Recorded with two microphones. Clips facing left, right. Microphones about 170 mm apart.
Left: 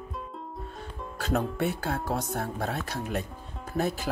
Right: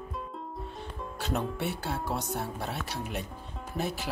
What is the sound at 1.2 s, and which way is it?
Speech, 45° left (ahead or behind).